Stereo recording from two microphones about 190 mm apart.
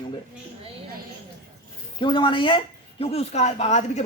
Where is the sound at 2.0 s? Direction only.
25° left (ahead or behind).